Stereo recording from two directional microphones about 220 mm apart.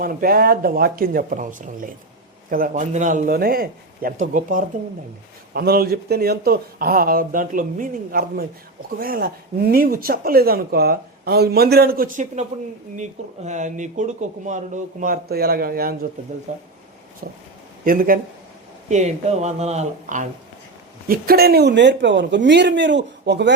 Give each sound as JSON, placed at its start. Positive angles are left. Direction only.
{"t": 0.0, "sound": "speech", "side_deg": -40}
{"t": 17.8, "sound": "speech", "side_deg": -40}
{"t": 21.1, "sound": "speech", "side_deg": -45}